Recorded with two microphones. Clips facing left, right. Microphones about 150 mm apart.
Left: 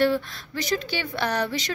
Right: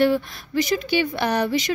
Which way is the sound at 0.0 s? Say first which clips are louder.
Right 3 dB; 15° right (ahead or behind).